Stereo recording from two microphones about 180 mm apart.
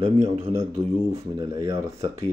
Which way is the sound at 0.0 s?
35° right (ahead or behind).